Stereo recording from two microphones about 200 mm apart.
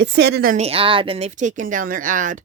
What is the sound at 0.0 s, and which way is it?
Speech, 55° right (ahead or behind).